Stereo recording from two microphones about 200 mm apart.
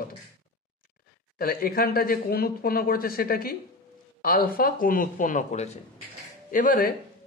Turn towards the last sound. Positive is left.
turn(degrees=40)  # may be behind; listen again after turning